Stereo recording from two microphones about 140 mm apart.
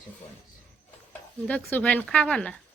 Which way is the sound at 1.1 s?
10° left (ahead or behind).